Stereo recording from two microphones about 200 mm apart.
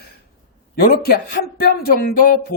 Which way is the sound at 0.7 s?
50° left (ahead or behind).